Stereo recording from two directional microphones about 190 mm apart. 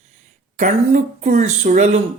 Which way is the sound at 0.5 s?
40° right (ahead or behind).